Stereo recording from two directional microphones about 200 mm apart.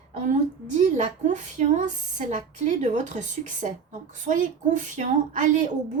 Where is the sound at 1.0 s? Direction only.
35° right (ahead or behind).